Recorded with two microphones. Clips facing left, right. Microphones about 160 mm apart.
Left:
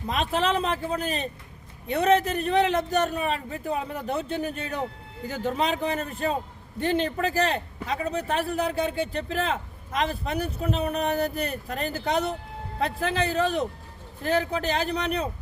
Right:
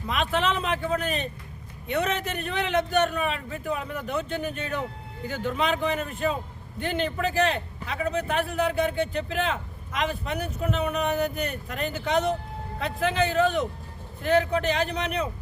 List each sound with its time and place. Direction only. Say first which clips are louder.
0.1 s a man's voice: left 1 dB; 35° left (ahead or behind)